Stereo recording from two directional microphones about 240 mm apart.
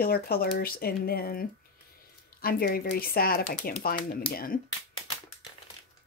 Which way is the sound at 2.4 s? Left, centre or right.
Left.